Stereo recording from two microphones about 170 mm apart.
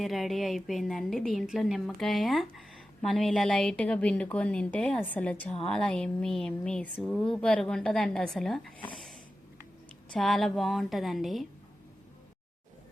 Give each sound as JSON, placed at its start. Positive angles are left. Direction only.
{"t": 0.0, "sound": "a woman's voice", "side_deg": 0}
{"t": 8.9, "sound": "snort", "side_deg": 0}
{"t": 10.1, "sound": "a woman's voice", "side_deg": 0}